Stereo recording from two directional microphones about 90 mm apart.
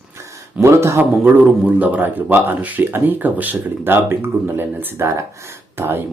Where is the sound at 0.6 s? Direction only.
30° right (ahead or behind).